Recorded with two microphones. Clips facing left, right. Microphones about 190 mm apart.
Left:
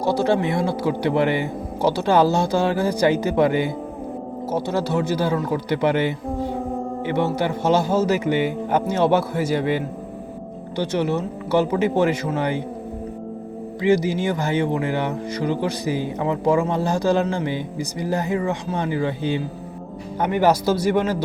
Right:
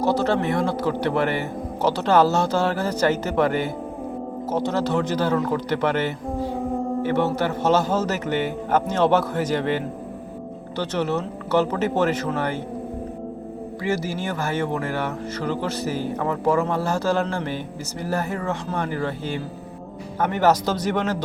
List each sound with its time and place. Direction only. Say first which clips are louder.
0.0 s speech: left 1 dB; 10° left (ahead or behind)
13.8 s speech: left 7 dB; 15° left (ahead or behind)